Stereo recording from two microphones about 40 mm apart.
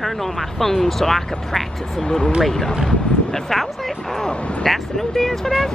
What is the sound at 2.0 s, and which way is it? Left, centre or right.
Speech, centre.